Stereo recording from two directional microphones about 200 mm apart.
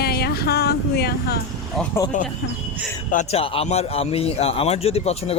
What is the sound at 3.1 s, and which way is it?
A man's voice, 30° left (ahead or behind).